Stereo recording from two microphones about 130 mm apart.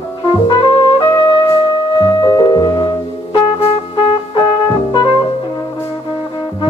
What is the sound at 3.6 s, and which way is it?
Trumpet, 50° left (ahead or behind).